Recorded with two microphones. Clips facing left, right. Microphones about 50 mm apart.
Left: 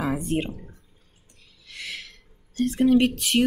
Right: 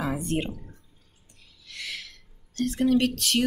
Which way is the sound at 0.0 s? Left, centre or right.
Centre.